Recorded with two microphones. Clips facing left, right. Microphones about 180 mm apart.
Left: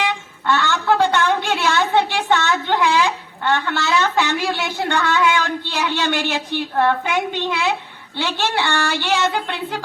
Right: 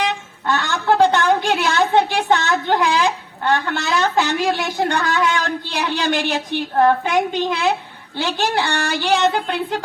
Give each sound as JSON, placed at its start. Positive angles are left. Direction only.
{"t": 0.4, "sound": "a woman's voice", "side_deg": -35}